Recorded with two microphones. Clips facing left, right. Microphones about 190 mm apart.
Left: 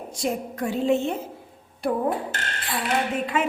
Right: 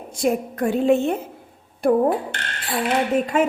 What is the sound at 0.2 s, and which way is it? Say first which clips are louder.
A woman's voice: right 6 dB; 55° right (ahead or behind).